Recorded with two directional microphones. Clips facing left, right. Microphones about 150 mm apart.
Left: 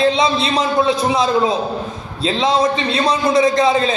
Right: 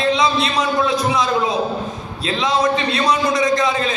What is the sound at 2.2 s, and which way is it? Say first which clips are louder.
A man's voice: left 3 dB; 25° left (ahead or behind).